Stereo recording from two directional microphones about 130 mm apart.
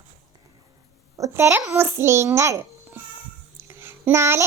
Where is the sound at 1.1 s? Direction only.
20° right (ahead or behind).